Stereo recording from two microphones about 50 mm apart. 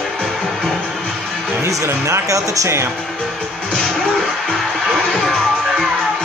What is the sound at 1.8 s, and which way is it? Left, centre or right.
Speech, right.